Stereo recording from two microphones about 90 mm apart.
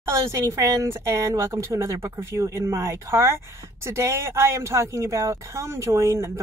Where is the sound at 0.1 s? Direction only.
35° right (ahead or behind).